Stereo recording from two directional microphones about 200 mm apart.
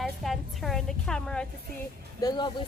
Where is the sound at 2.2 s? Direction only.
20° left (ahead or behind).